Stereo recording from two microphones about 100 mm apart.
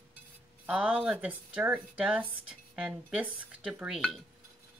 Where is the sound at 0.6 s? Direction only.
10° right (ahead or behind).